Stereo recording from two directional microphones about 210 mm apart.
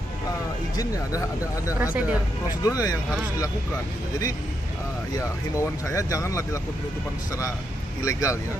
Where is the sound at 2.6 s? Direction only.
15° left (ahead or behind).